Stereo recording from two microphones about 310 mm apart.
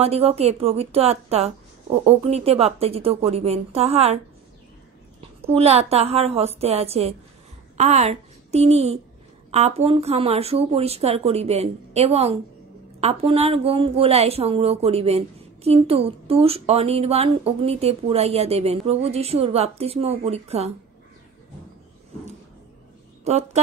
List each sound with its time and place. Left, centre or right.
0.0 s speech: centre
5.2 s a child's voice: centre
23.2 s speech: right